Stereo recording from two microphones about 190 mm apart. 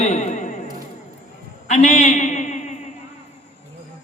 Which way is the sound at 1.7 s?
40° left (ahead or behind).